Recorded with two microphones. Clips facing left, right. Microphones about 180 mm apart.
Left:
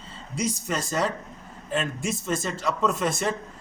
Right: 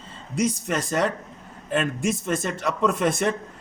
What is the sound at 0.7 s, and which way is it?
A man's voice, 60° right (ahead or behind).